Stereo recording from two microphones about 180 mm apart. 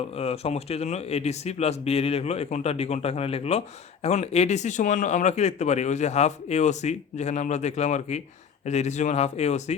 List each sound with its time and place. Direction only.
0.1 s speech: 35° left (ahead or behind)